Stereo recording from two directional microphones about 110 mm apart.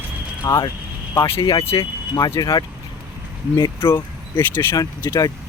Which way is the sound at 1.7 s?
40° left (ahead or behind).